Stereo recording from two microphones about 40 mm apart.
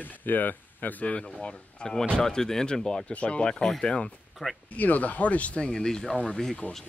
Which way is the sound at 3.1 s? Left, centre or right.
Left.